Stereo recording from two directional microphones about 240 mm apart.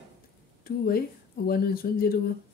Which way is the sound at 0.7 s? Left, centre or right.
Left.